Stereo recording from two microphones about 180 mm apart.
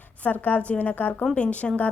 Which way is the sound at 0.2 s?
10° left (ahead or behind).